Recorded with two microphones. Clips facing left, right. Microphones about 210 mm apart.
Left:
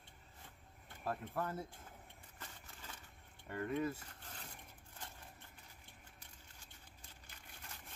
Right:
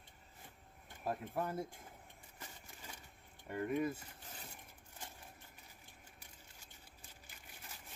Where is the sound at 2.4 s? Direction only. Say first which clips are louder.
Right 1 dB; 15° right (ahead or behind).